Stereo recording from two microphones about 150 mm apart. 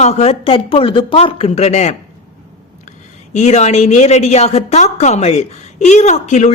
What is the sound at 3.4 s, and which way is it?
A woman's voice, 45° left (ahead or behind).